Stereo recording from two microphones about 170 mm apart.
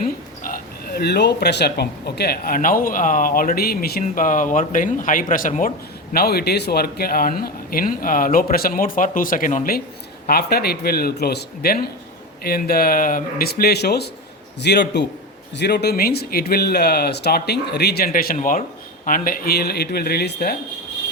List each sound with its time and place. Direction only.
0.0 s speech: 55° left (ahead or behind)
4.0 s speech: 50° left (ahead or behind)
6.1 s speech: 65° left (ahead or behind)
10.2 s a man's voice: 65° left (ahead or behind)